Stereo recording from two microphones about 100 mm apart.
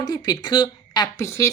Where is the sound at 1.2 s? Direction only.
30° left (ahead or behind).